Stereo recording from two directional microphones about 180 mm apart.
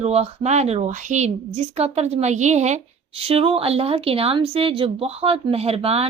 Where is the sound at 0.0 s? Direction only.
35° right (ahead or behind).